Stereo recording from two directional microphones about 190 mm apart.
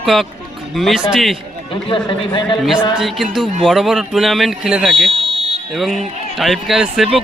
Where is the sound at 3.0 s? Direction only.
Centre (ahead or behind).